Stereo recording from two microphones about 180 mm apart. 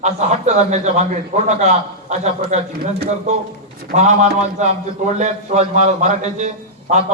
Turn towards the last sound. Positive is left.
turn(degrees=-40)  # may be behind; listen again after turning